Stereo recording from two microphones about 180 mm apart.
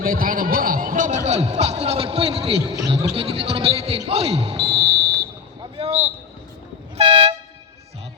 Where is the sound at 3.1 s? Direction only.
30° right (ahead or behind).